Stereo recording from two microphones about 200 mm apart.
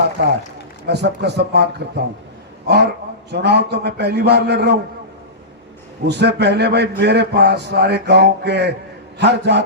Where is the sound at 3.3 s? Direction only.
55° right (ahead or behind).